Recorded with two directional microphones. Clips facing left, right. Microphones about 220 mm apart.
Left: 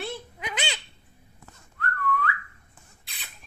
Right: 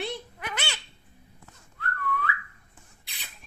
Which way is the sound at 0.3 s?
15° left (ahead or behind).